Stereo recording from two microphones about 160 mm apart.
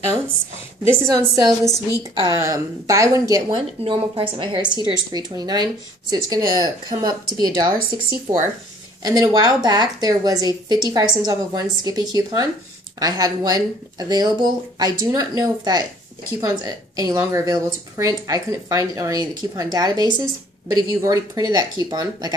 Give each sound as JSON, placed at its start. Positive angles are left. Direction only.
{"t": 1.1, "sound": "a woman's voice", "side_deg": -20}